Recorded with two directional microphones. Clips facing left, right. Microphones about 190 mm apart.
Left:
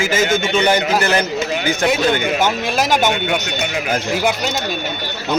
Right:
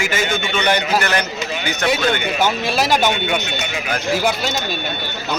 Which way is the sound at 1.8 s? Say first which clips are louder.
Left 1 dB; 15° left (ahead or behind).